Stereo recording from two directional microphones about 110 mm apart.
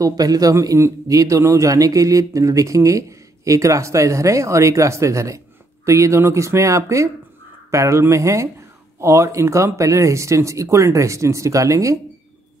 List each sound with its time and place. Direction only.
0.0 s a man's voice: 35° right (ahead or behind)